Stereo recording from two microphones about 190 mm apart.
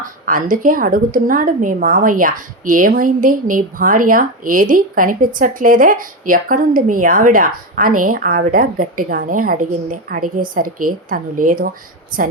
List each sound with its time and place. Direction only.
0.0 s a woman's voice: 45° right (ahead or behind)